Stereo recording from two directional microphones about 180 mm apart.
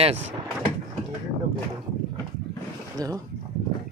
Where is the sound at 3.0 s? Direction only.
20° right (ahead or behind).